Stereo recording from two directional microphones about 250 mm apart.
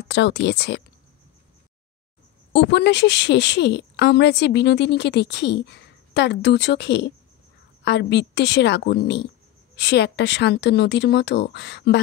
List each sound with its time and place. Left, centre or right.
0.1 s speech: left
2.5 s a woman's voice: left